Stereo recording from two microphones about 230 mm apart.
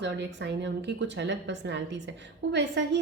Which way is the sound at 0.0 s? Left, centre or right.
Right.